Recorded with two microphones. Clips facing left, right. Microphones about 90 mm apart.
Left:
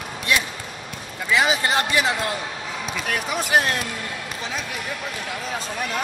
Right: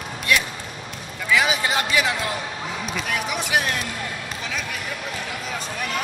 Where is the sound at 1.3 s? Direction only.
30° left (ahead or behind).